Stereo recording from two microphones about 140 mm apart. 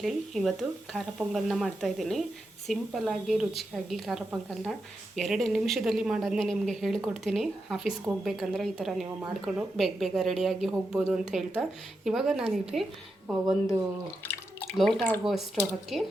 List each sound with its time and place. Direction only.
0.0 s speech: centre (ahead or behind)
14.3 s drip: 5° left (ahead or behind)
15.2 s speech: centre (ahead or behind)